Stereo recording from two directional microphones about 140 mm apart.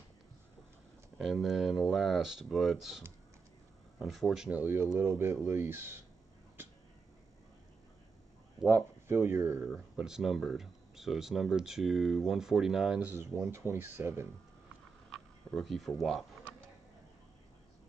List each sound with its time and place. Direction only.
1.1 s speech: centre (ahead or behind)
4.0 s speech: centre (ahead or behind)
8.6 s speech: 15° right (ahead or behind)
9.9 s speech: 5° right (ahead or behind)
13.1 s speech: 15° right (ahead or behind)
15.0 s a sound: centre (ahead or behind)
16.0 s speech: centre (ahead or behind)